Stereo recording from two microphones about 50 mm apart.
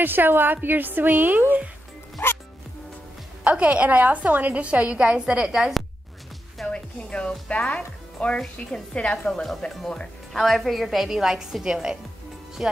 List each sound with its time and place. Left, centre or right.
0.0 s a woman's voice: right
3.4 s a woman's voice: right
5.6 s a woman's voice: centre
6.7 s speech: left
8.6 s a woman's voice: left
8.9 s a woman's voice: centre
9.3 s a woman's voice: centre